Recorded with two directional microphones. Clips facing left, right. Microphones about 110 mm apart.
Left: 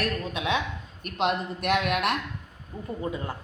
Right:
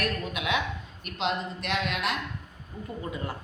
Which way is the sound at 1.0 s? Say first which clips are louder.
Left 3 dB; 50° left (ahead or behind).